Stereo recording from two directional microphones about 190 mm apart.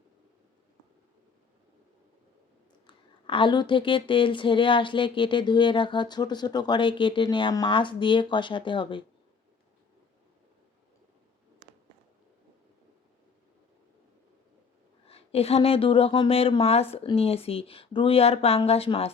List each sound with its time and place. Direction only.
2.8 s speech: 25° left (ahead or behind)
15.0 s a woman's voice: 30° left (ahead or behind)